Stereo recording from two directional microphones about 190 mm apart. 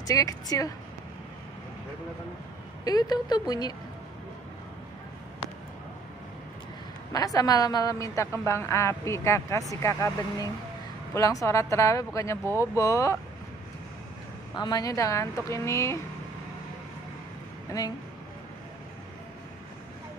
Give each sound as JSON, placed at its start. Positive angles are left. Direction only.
{"t": 0.0, "sound": "speech", "side_deg": 20}
{"t": 2.8, "sound": "speech", "side_deg": 20}
{"t": 7.1, "sound": "a woman's voice", "side_deg": 20}
{"t": 14.5, "sound": "a woman's voice", "side_deg": 20}
{"t": 17.6, "sound": "speech", "side_deg": 20}